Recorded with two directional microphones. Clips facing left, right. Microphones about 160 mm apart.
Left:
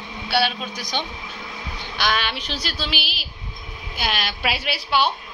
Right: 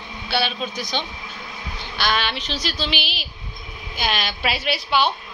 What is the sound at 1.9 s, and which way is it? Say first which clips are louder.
A woman's voice: right 1 dB; 10° left (ahead or behind).